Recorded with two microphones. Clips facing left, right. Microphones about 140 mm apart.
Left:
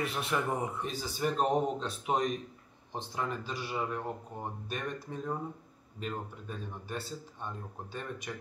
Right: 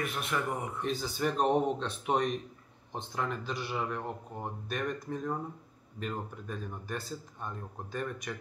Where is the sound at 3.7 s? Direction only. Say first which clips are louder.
Left 2 dB; 5° left (ahead or behind).